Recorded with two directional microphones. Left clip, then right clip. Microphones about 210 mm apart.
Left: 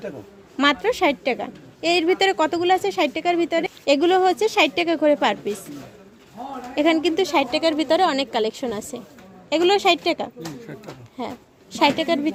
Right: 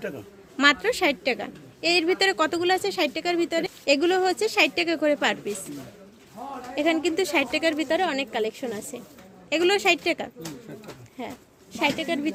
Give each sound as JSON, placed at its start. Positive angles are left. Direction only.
{"t": 0.5, "sound": "a woman's voice", "side_deg": 10}
{"t": 6.7, "sound": "a woman's voice", "side_deg": 15}
{"t": 11.2, "sound": "speech", "side_deg": 20}